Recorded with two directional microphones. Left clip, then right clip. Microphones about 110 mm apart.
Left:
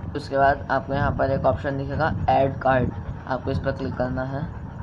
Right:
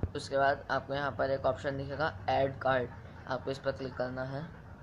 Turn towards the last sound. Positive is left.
turn(degrees=-15)  # may be behind; listen again after turning